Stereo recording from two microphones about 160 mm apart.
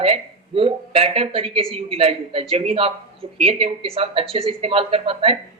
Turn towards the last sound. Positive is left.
turn(degrees=-35)  # may be behind; listen again after turning